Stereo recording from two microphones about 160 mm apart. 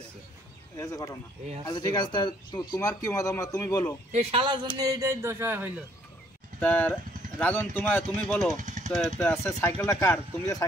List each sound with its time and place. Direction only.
0.7 s speech: 20° left (ahead or behind)
4.1 s speech: 40° right (ahead or behind); by 5.7 s 15° right (ahead or behind)
6.6 s speech: 10° left (ahead or behind)
8.3 s speech: centre (ahead or behind)
8.5 s jackhammer: 50° right (ahead or behind)
8.9 s speech: centre (ahead or behind)
9.4 s speech: 15° left (ahead or behind)